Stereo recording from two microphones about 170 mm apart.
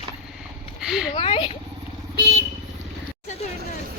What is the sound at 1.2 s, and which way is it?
Speech, 30° left (ahead or behind).